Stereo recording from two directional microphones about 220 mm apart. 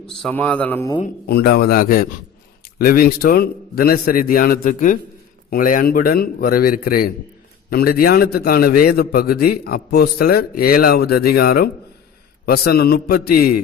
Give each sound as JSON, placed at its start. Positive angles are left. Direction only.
{"t": 0.2, "sound": "speech", "side_deg": 5}
{"t": 1.3, "sound": "a man's voice", "side_deg": 45}